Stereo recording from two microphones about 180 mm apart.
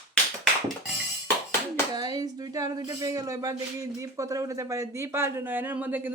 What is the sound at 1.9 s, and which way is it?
Speech, 25° right (ahead or behind).